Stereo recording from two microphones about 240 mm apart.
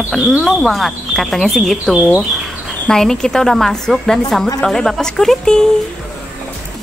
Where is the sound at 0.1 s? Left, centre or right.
Centre.